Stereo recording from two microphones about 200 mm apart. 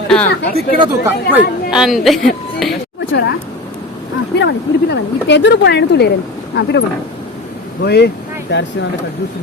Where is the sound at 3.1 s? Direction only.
60° left (ahead or behind).